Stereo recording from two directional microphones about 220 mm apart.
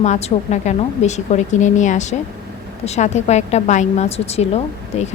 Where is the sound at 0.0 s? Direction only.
30° left (ahead or behind).